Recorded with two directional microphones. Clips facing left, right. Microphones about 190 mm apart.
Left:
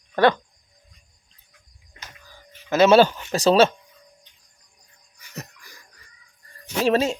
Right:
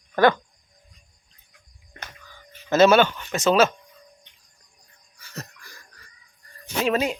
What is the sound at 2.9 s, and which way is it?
Speech, 35° left (ahead or behind).